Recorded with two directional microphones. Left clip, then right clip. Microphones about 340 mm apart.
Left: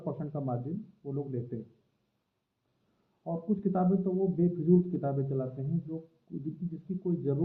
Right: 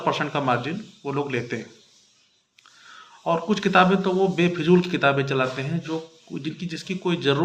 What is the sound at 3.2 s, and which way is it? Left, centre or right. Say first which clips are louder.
A man's voice: right 12 dB; right.